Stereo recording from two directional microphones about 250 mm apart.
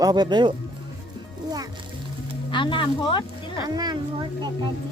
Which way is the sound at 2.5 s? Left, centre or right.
Centre.